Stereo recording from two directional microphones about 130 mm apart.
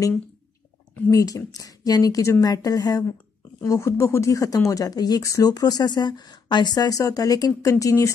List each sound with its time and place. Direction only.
1.1 s speech: 25° left (ahead or behind)